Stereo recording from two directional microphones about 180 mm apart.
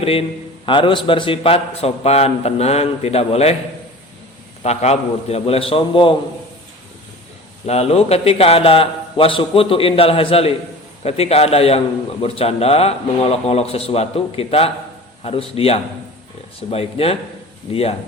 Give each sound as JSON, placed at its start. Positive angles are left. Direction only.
{"t": 0.0, "sound": "a man's voice", "side_deg": 30}
{"t": 4.6, "sound": "a man's voice", "side_deg": 35}
{"t": 7.7, "sound": "a man's voice", "side_deg": 35}